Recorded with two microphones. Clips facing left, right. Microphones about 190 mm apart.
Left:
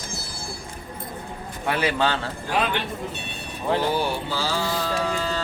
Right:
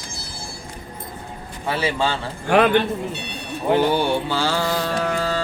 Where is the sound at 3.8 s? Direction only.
70° right (ahead or behind).